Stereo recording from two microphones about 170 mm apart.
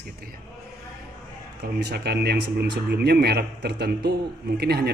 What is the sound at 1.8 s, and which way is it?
Speech, 70° right (ahead or behind).